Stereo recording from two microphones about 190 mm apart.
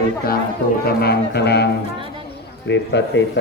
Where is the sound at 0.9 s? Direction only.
55° left (ahead or behind).